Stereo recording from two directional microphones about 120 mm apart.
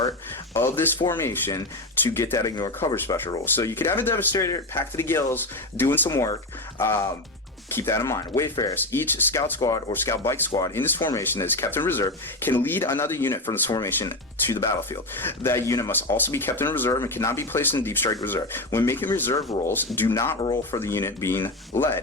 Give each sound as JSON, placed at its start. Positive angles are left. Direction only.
{"t": 0.5, "sound": "speech", "side_deg": 20}
{"t": 9.9, "sound": "speech", "side_deg": 20}
{"t": 13.7, "sound": "speech", "side_deg": 30}
{"t": 15.2, "sound": "speech", "side_deg": 20}